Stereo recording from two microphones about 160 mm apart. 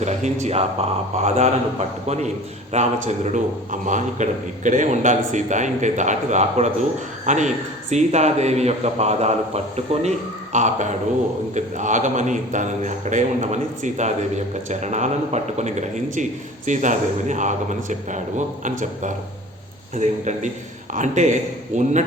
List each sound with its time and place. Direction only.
0.0 s speech: 45° right (ahead or behind)